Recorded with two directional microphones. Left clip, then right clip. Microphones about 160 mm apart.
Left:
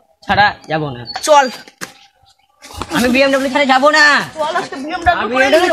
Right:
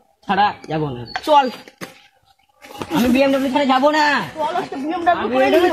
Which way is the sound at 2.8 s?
15° left (ahead or behind).